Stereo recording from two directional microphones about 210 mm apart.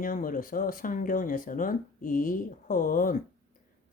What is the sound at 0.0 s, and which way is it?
Speech, 40° left (ahead or behind).